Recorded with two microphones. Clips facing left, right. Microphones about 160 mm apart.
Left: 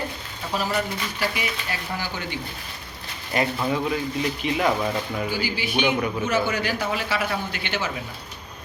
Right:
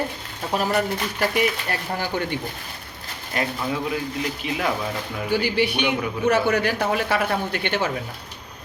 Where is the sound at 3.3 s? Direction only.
Centre (ahead or behind).